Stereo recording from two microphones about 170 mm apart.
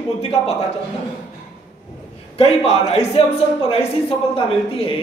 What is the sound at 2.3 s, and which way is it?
A man's voice, 35° left (ahead or behind).